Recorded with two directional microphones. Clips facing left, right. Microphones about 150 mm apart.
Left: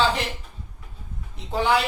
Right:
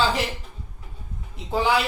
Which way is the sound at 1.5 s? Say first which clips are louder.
Even; centre (ahead or behind).